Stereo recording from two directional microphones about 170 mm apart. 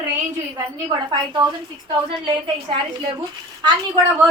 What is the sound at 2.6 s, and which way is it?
Speech, 30° right (ahead or behind).